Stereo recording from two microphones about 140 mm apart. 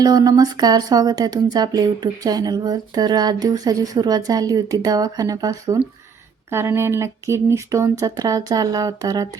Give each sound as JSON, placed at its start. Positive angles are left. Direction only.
{"t": 0.0, "sound": "speech", "side_deg": -30}